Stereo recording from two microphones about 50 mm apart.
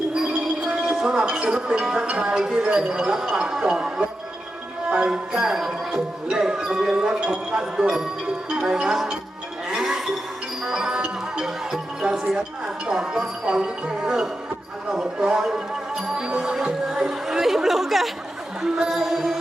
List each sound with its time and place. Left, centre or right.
0.1 s speech: centre
9.6 s music: centre
12.0 s speech: centre
18.6 s music: centre